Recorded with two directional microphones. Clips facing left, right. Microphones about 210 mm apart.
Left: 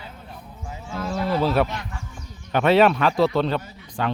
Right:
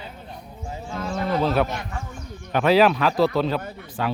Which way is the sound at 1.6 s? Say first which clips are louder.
Right 3 dB; 50° right (ahead or behind).